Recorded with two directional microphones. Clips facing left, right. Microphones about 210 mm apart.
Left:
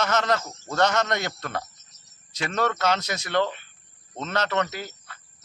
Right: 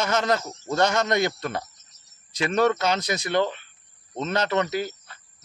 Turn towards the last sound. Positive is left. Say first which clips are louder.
# right 3 dB
turn(degrees=-15)  # may be behind; listen again after turning